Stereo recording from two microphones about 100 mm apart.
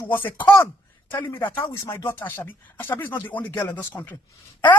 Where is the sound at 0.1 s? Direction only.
20° left (ahead or behind).